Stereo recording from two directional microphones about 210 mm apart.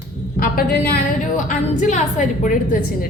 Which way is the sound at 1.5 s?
35° left (ahead or behind).